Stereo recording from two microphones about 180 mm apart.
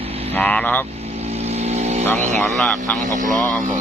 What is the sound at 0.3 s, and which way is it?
Speech, 5° left (ahead or behind).